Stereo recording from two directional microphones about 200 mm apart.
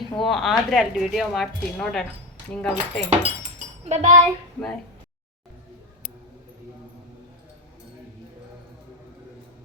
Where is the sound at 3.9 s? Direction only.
35° right (ahead or behind).